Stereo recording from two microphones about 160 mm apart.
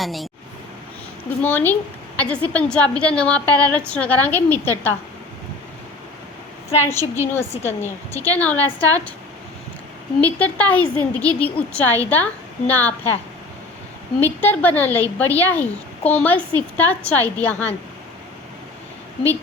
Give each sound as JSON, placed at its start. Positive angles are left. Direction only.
{"t": 0.0, "sound": "speech", "side_deg": 0}
{"t": 1.4, "sound": "a woman's voice", "side_deg": 10}
{"t": 6.8, "sound": "a woman's voice", "side_deg": 15}
{"t": 10.2, "sound": "a woman's voice", "side_deg": 10}
{"t": 14.2, "sound": "a woman's voice", "side_deg": 10}